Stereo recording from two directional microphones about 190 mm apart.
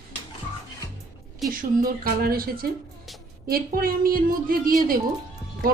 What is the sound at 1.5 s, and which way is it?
A woman's voice, 50° right (ahead or behind).